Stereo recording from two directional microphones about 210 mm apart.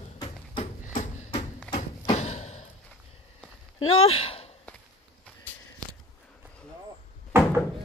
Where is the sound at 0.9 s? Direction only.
25° left (ahead or behind).